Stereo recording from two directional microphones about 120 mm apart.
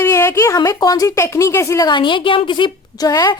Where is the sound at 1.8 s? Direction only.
40° left (ahead or behind).